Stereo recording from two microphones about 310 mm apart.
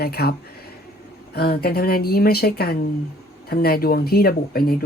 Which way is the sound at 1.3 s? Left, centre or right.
Left.